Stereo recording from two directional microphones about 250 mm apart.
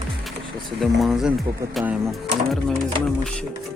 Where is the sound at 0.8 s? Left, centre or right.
Centre.